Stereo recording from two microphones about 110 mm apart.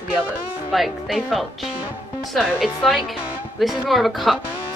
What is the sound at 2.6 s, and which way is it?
A woman's voice, 5° right (ahead or behind).